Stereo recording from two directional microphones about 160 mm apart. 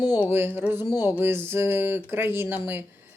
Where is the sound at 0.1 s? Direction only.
15° right (ahead or behind).